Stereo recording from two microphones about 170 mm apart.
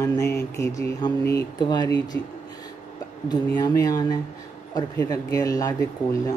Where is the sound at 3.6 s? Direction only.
20° left (ahead or behind).